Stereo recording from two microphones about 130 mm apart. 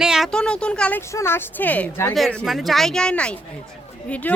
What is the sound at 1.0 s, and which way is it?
A woman's voice, 20° left (ahead or behind).